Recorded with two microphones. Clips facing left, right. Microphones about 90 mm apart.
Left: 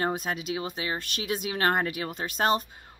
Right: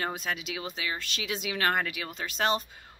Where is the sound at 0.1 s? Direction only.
45° left (ahead or behind).